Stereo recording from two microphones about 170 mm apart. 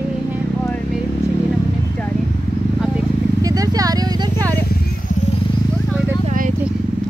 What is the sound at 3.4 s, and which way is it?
Speech, 20° right (ahead or behind).